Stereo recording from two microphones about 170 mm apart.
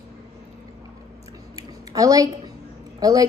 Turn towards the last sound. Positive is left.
turn(degrees=-20)  # may be behind; listen again after turning